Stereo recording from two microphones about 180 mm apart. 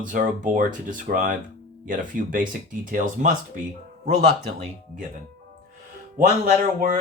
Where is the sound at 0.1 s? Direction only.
50° right (ahead or behind).